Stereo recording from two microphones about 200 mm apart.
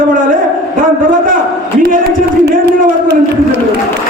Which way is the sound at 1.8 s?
45° right (ahead or behind).